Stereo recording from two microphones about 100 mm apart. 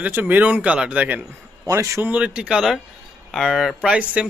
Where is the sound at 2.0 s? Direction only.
15° right (ahead or behind).